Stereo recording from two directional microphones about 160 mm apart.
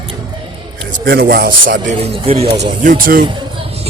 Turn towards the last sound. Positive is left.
turn(degrees=-60)  # may be behind; listen again after turning